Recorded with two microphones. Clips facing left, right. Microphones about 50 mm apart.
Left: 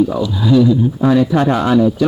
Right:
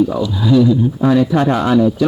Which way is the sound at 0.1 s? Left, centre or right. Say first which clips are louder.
Even; centre.